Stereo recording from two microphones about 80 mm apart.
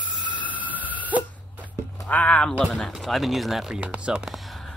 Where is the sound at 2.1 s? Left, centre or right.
Centre.